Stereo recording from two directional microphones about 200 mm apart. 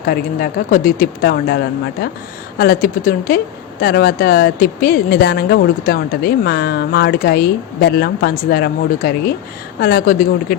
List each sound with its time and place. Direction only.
0.0 s speech: 50° left (ahead or behind)